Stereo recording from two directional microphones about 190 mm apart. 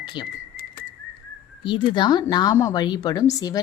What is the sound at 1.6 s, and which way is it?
A woman's voice, 25° left (ahead or behind).